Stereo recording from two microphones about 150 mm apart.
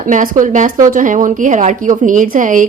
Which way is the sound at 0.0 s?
60° right (ahead or behind).